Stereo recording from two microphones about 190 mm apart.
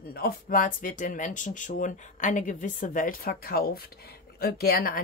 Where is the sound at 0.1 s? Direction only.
50° left (ahead or behind).